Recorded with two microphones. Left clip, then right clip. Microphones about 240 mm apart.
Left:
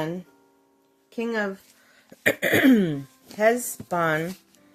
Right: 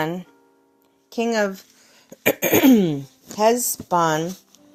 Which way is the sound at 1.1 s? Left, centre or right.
Right.